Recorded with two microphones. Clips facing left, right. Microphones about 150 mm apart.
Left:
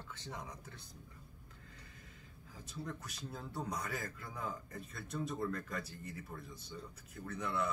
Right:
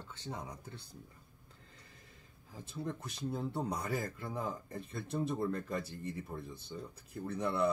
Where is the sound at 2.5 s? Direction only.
30° right (ahead or behind).